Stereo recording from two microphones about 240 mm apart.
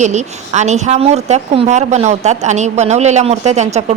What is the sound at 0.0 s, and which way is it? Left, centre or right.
Speech, right.